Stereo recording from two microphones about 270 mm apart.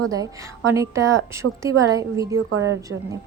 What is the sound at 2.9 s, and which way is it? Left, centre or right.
Speech, right.